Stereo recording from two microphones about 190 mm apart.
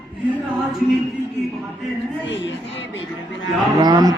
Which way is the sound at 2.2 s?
75° left (ahead or behind).